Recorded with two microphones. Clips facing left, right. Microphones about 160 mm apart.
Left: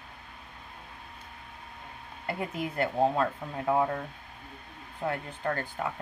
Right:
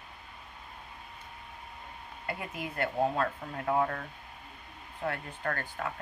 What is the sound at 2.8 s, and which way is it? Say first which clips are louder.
Speech: left 3 dB; 25° left (ahead or behind).